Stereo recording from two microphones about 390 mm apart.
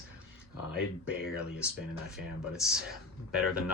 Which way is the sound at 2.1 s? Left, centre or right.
Centre.